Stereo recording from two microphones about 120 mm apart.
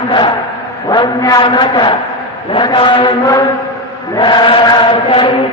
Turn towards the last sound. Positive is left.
turn(degrees=50)  # may be behind; listen again after turning